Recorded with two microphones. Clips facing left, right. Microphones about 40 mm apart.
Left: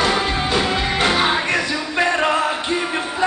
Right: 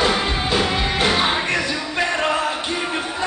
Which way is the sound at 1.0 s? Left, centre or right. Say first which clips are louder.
Left 2 dB; centre.